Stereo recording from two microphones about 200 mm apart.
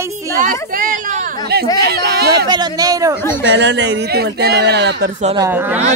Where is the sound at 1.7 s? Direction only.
50° right (ahead or behind).